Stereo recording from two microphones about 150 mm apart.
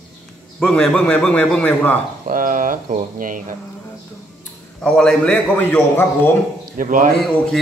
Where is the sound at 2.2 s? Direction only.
65° right (ahead or behind).